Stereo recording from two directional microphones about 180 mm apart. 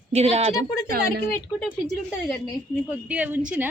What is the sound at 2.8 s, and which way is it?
Speech, 10° right (ahead or behind).